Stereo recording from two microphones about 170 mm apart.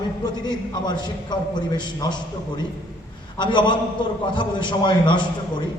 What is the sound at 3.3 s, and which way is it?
A man's voice, 25° left (ahead or behind).